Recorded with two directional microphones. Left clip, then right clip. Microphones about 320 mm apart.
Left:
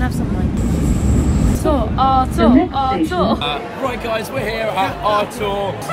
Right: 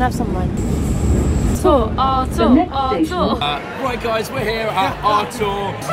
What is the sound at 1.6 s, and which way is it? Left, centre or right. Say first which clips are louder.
Speech: right 3 dB; centre.